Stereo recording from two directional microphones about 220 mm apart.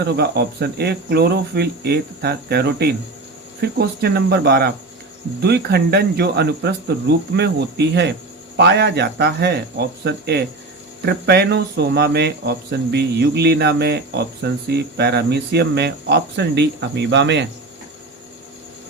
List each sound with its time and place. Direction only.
0.0 s speech: 45° right (ahead or behind)